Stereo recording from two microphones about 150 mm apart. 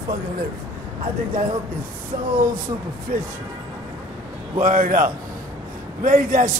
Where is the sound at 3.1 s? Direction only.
90° right.